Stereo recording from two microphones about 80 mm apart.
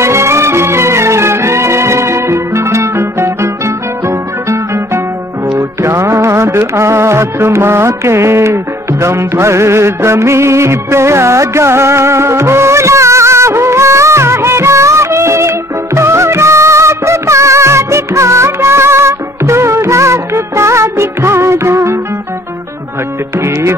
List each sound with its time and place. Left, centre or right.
0.0 s music: right